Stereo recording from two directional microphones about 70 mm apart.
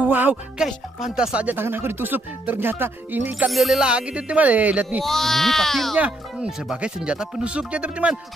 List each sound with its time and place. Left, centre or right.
0.0 s speech: right
0.6 s speech: centre
1.5 s speech: right
3.4 s speech: centre
3.8 s speech: centre
5.0 s speech: centre
5.9 s speech: right
6.7 s speech: centre